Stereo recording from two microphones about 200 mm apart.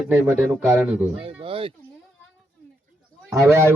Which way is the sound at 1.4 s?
25° right (ahead or behind).